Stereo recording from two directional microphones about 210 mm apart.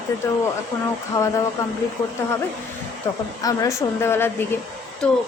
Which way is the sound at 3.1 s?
20° left (ahead or behind).